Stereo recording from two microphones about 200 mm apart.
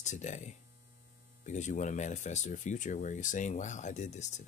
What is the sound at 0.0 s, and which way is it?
Speech, 35° left (ahead or behind).